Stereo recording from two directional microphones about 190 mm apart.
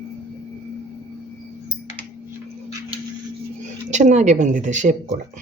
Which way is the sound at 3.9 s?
40° right (ahead or behind).